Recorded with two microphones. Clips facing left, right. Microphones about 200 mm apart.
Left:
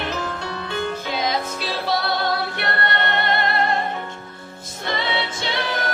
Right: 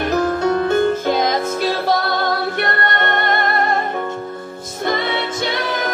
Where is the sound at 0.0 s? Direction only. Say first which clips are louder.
Right 10 dB; 45° right (ahead or behind).